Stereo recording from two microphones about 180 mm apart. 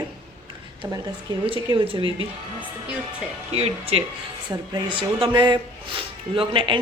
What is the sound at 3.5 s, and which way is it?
Speech, 35° right (ahead or behind).